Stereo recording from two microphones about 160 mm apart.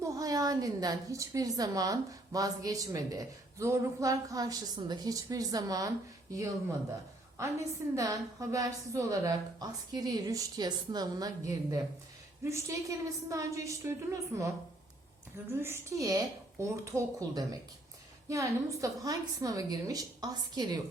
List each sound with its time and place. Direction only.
0.0 s a woman's voice: 20° right (ahead or behind)
15.5 s a woman's voice: 15° right (ahead or behind)